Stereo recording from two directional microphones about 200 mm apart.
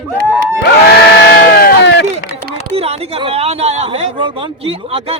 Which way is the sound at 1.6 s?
60° left (ahead or behind).